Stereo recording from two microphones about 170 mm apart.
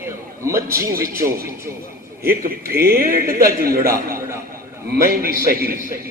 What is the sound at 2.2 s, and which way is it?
A man's voice, 65° right (ahead or behind).